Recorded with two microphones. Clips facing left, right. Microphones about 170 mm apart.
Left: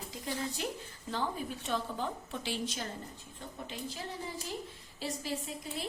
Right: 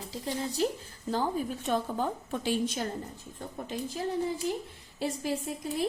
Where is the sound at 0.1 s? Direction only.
35° right (ahead or behind).